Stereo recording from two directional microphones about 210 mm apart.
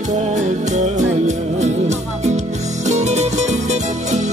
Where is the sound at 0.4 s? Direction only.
35° right (ahead or behind).